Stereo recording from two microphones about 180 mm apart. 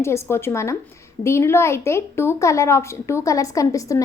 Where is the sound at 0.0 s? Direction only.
15° left (ahead or behind).